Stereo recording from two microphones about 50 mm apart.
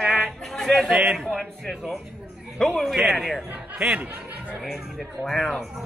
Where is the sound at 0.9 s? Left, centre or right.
Centre.